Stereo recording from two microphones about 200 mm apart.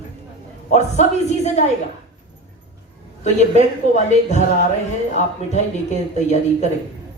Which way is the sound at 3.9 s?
35° left (ahead or behind).